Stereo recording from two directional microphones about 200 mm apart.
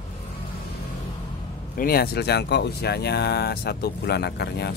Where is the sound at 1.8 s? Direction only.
50° left (ahead or behind).